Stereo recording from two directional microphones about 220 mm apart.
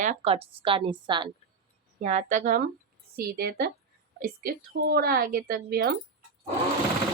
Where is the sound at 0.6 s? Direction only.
25° right (ahead or behind).